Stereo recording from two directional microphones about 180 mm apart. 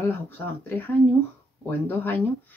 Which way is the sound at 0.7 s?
10° left (ahead or behind).